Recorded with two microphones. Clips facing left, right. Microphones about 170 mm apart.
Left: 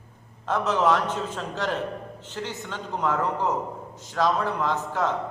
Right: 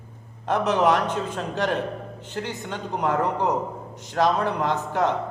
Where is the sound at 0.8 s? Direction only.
15° right (ahead or behind).